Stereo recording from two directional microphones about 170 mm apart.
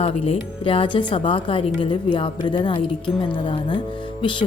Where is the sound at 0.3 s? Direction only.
30° left (ahead or behind).